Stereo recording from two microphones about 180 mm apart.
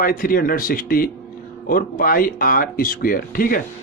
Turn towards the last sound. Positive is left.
turn(degrees=50)  # may be behind; listen again after turning